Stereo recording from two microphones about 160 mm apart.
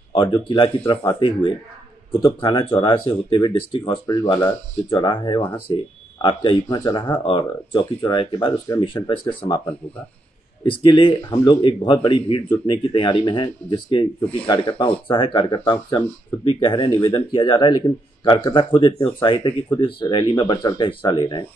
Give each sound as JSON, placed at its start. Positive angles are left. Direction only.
{"t": 0.1, "sound": "speech", "side_deg": 30}
{"t": 10.6, "sound": "speech", "side_deg": 30}